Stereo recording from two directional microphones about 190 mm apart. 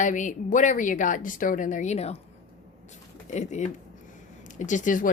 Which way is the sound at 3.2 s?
35° left (ahead or behind).